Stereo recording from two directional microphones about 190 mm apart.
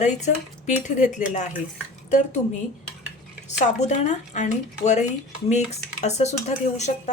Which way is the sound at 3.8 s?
40° left (ahead or behind).